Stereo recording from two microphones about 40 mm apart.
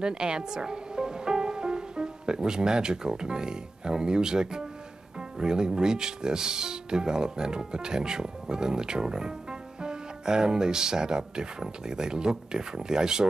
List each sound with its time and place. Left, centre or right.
0.0 s speech: centre